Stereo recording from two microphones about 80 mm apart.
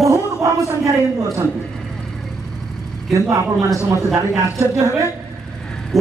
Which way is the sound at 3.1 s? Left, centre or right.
Right.